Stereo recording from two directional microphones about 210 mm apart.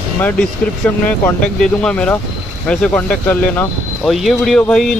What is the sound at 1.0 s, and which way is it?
Speech, 5° left (ahead or behind).